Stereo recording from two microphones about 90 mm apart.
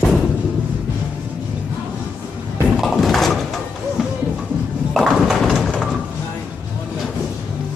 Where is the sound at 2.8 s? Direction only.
Centre (ahead or behind).